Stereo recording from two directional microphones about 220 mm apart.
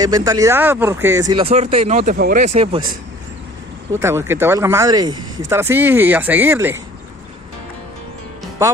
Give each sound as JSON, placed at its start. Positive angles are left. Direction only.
{"t": 0.0, "sound": "speech", "side_deg": -15}
{"t": 3.9, "sound": "speech", "side_deg": -10}